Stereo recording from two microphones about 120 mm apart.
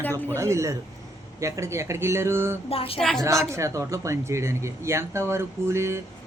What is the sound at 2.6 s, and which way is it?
Speech, 50° left (ahead or behind).